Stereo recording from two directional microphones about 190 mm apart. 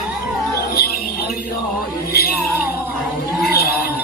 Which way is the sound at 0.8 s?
55° left (ahead or behind).